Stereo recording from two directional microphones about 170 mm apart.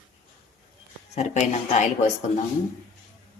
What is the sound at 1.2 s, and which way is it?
Speech, 40° left (ahead or behind).